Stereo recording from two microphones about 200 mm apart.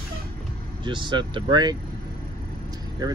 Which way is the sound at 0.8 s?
25° right (ahead or behind).